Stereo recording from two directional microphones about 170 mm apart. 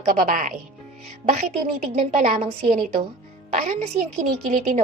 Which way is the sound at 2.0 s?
40° right (ahead or behind).